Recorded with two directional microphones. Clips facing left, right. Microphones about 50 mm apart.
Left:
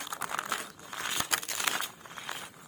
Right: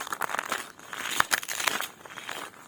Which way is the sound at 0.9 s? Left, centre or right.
Right.